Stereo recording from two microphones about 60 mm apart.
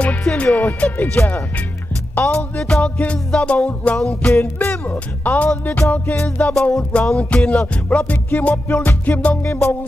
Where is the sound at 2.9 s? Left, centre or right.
Left.